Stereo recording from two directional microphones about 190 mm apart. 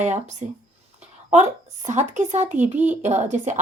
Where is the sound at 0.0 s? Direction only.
40° right (ahead or behind).